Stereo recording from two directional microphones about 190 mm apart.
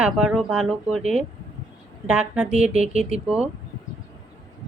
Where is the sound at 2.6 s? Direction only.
35° right (ahead or behind).